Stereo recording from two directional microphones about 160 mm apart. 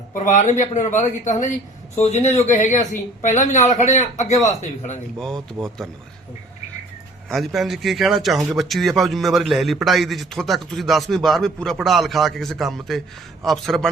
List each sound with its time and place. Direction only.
0.1 s speech: 50° left (ahead or behind)
5.2 s a man's voice: 5° left (ahead or behind)
7.3 s a man's voice: centre (ahead or behind)